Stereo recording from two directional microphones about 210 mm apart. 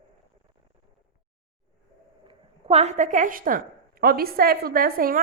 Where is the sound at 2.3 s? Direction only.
30° right (ahead or behind).